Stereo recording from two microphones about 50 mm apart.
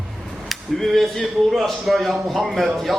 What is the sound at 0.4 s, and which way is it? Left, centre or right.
Speech, centre.